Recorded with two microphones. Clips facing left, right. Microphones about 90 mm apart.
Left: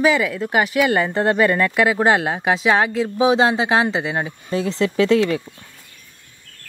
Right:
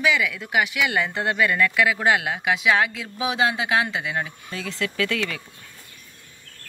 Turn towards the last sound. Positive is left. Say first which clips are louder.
# left 10 dB
turn(degrees=30)  # may be behind; listen again after turning